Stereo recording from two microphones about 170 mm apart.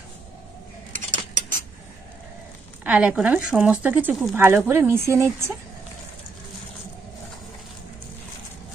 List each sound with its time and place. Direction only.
0.9 s cutlery: 50° right (ahead or behind)
2.8 s speech: 10° right (ahead or behind)